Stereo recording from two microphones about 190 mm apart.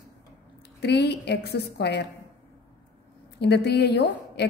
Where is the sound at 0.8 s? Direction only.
60° left (ahead or behind).